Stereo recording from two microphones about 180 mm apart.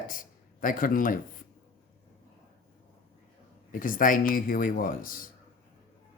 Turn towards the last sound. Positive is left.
turn(degrees=50)  # may be behind; listen again after turning